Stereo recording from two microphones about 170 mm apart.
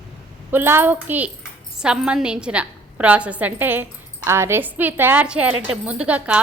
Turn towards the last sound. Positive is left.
turn(degrees=-10)  # may be behind; listen again after turning